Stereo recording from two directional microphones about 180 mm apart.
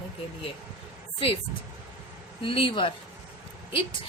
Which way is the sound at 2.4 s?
30° left (ahead or behind).